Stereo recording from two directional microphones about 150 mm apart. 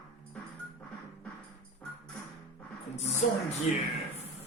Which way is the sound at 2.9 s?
45° left (ahead or behind).